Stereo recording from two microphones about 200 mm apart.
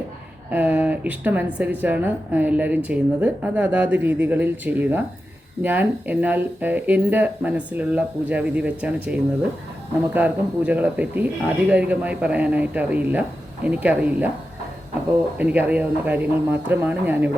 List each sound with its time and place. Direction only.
0.5 s speech: 10° right (ahead or behind)
15.4 s speech: 10° right (ahead or behind)